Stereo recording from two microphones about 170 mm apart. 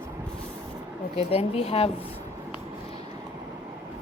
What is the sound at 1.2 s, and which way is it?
Speech, 35° left (ahead or behind).